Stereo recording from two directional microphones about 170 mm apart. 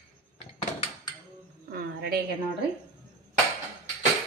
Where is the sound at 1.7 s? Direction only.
65° right (ahead or behind).